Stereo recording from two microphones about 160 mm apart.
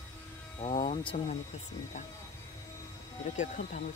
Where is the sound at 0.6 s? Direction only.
35° left (ahead or behind).